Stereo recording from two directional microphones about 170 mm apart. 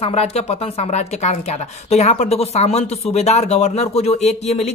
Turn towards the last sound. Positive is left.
turn(degrees=40)  # may be behind; listen again after turning